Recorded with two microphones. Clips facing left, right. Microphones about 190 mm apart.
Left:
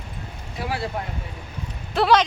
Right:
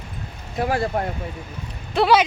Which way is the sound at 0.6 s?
50° right (ahead or behind).